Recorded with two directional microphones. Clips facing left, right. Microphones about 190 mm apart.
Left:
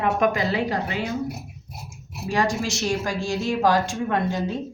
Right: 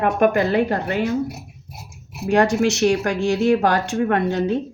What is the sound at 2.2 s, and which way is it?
A woman's voice, 65° right (ahead or behind).